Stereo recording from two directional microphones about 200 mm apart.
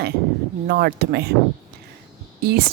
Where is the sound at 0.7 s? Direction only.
50° right (ahead or behind).